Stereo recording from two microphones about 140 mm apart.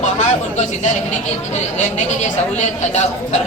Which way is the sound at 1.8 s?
55° left (ahead or behind).